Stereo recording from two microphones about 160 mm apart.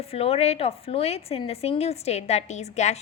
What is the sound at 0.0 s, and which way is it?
A woman's voice, 40° left (ahead or behind).